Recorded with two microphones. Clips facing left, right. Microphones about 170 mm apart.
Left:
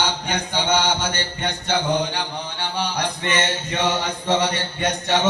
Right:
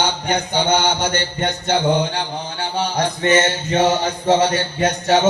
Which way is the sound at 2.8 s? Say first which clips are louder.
Right 6 dB; 40° right (ahead or behind).